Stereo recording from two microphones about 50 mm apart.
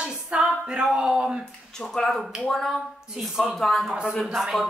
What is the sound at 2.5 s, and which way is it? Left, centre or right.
A woman's voice, centre.